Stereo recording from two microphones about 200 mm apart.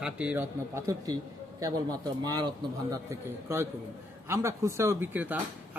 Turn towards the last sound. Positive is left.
turn(degrees=-10)  # may be behind; listen again after turning